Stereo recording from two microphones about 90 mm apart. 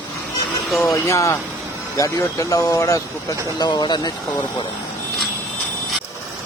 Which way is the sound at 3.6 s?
55° left (ahead or behind).